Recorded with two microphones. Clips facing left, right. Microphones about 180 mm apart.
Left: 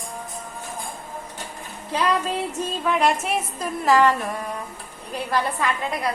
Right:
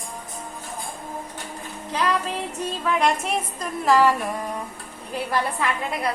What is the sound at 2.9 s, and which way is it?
A woman's voice, 5° left (ahead or behind).